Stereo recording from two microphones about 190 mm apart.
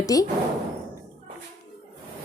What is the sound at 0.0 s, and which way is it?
Speech, 20° left (ahead or behind).